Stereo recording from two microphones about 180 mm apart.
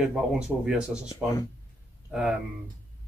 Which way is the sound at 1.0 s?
20° left (ahead or behind).